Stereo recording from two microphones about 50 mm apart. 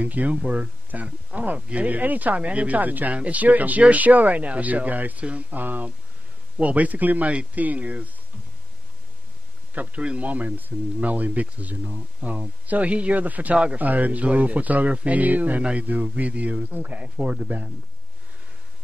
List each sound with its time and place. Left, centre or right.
0.0 s speech: right
0.4 s speech: centre
0.9 s speech: right
9.8 s speech: right
17.0 s speech: centre